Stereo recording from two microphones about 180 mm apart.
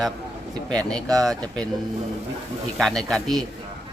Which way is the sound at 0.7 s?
5° left (ahead or behind).